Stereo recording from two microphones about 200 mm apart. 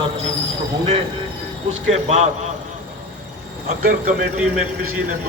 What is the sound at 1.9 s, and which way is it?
Speech, 35° right (ahead or behind).